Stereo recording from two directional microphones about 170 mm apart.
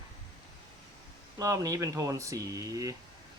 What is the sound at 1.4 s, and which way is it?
Speech, 20° right (ahead or behind).